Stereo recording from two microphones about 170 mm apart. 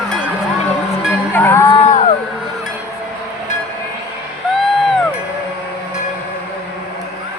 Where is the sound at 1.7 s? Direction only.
40° left (ahead or behind).